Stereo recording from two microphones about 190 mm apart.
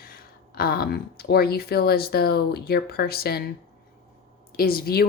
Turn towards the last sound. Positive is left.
turn(degrees=55)  # may be behind; listen again after turning